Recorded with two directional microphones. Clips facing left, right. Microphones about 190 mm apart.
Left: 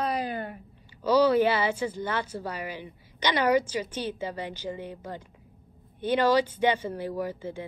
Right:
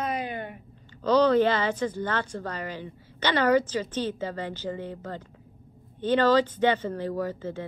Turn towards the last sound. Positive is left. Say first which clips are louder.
# right 2 dB
turn(degrees=10)  # may be behind; listen again after turning